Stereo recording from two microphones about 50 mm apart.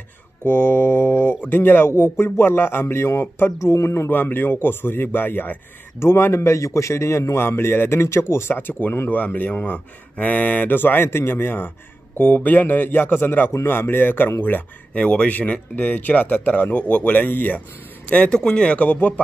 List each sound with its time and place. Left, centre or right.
0.4 s mantra: left
1.4 s speech: left
3.5 s speech: left
4.1 s speech: left
5.9 s a man's voice: left
7.4 s speech: left
9.1 s speech: left
12.2 s speech: left
14.4 s speech: left
18.1 s speech: left
18.9 s speech: left